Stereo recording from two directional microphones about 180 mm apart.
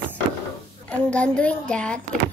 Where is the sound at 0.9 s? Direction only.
5° left (ahead or behind).